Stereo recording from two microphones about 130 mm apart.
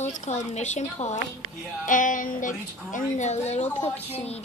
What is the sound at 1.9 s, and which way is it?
A woman's voice, 85° left.